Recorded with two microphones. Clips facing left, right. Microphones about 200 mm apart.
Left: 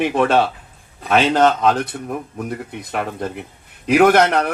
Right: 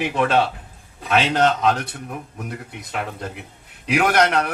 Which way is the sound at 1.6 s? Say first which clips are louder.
Left 3 dB; 50° left (ahead or behind).